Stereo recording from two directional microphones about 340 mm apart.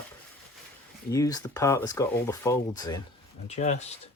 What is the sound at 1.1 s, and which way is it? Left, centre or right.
Speech, centre.